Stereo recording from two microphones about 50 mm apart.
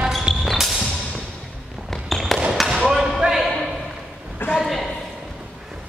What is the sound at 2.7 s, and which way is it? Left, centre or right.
Basketball bounce, centre.